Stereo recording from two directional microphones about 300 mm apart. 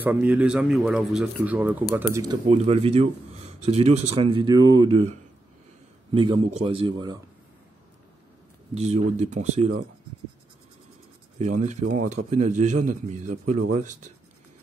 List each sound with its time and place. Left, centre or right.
0.0 s speech: centre
6.1 s speech: centre
8.7 s speech: right
11.3 s speech: right